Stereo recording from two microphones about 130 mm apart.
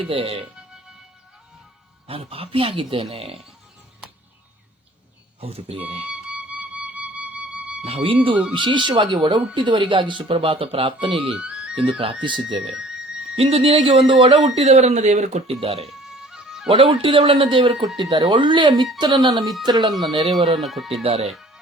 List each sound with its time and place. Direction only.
0.0 s speech: 45° right (ahead or behind)
2.0 s speech: 45° right (ahead or behind)
5.4 s speech: 50° right (ahead or behind)
6.1 s music: 10° right (ahead or behind)
7.9 s speech: 45° right (ahead or behind)
11.3 s music: 10° right (ahead or behind)
11.9 s speech: 45° right (ahead or behind)
12.6 s music: 5° right (ahead or behind)
13.3 s speech: 50° right (ahead or behind)
15.9 s music: 5° right (ahead or behind)
16.6 s speech: 45° right (ahead or behind)
19.9 s speech: centre (ahead or behind)
21.0 s speech: 50° right (ahead or behind)